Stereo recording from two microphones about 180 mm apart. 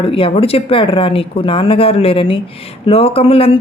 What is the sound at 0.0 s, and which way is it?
Speech, 30° left (ahead or behind).